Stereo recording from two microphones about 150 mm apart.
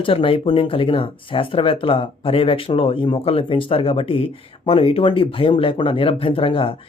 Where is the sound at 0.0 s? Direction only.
35° left (ahead or behind).